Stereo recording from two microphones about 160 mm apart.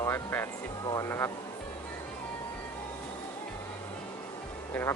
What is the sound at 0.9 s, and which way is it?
Speech, 20° left (ahead or behind).